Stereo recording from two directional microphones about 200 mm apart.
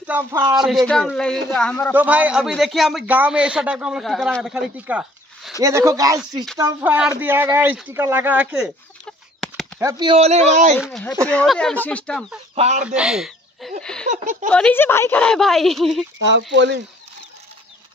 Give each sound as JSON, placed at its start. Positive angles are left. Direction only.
{"t": 0.0, "sound": "a man's voice", "side_deg": -10}
{"t": 2.0, "sound": "a man's voice", "side_deg": -5}
{"t": 9.8, "sound": "speech", "side_deg": -20}
{"t": 10.8, "sound": "a man's voice", "side_deg": 0}
{"t": 12.5, "sound": "speech", "side_deg": -35}
{"t": 12.8, "sound": "speech", "side_deg": -5}
{"t": 14.0, "sound": "speech", "side_deg": -40}
{"t": 14.5, "sound": "a man's voice", "side_deg": 10}
{"t": 16.2, "sound": "speech", "side_deg": -65}